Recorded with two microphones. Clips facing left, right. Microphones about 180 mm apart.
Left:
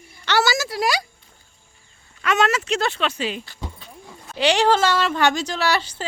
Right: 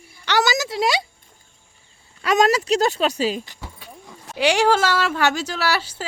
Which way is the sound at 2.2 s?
35° right (ahead or behind).